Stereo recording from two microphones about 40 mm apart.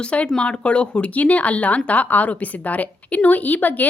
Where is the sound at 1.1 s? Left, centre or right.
Left.